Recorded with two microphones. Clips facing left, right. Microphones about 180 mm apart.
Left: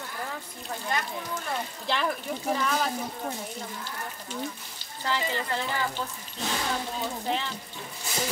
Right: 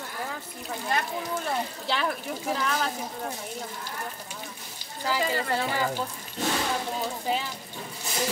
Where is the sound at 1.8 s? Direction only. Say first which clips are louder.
Even; centre (ahead or behind).